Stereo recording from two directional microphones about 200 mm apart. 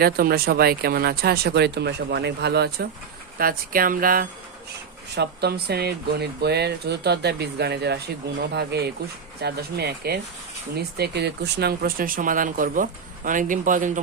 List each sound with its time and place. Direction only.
0.0 s speech: 50° right (ahead or behind)
5.1 s speech: 55° right (ahead or behind); by 14.0 s 40° right (ahead or behind)